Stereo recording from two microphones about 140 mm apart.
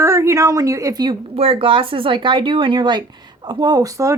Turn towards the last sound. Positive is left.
turn(degrees=-25)  # may be behind; listen again after turning